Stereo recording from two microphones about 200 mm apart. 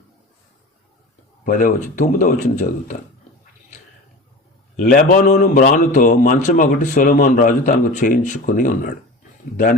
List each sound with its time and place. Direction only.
1.5 s a man's voice: 45° left (ahead or behind)
4.8 s a man's voice: 45° left (ahead or behind)